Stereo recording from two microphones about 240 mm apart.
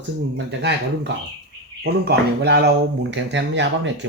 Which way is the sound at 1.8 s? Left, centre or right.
Right.